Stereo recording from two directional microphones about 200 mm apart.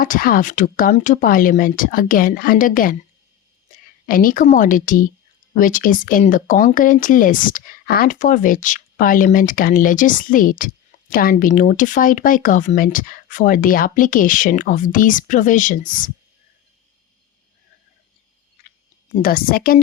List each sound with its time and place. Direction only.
0.0 s speech: 45° left (ahead or behind)
4.0 s speech: 45° left (ahead or behind)
19.1 s speech: 45° left (ahead or behind)